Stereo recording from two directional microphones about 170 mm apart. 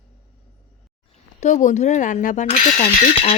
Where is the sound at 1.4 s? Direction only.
45° left (ahead or behind).